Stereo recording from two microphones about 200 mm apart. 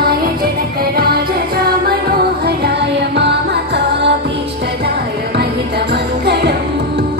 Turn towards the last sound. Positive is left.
turn(degrees=-55)  # may be behind; listen again after turning